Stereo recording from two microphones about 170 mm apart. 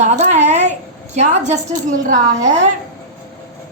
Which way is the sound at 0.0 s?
40° right (ahead or behind).